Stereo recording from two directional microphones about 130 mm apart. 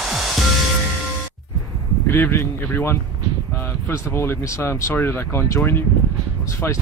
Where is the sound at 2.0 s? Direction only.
15° left (ahead or behind).